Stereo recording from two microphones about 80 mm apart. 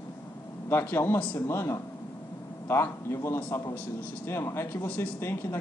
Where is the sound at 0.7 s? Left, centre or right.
Left.